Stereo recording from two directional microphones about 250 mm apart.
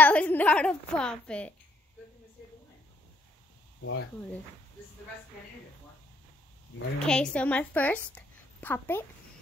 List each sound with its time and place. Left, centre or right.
0.0 s a woman's voice: centre
3.8 s speech: left
7.0 s a woman's voice: centre